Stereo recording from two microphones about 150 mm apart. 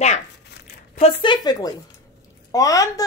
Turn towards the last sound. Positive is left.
turn(degrees=25)  # may be behind; listen again after turning